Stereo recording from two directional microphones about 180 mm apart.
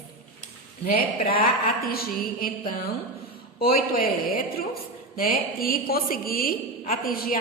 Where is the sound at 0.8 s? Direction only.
55° left (ahead or behind).